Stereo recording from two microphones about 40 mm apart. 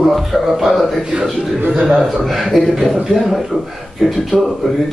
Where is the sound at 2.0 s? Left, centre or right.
Centre.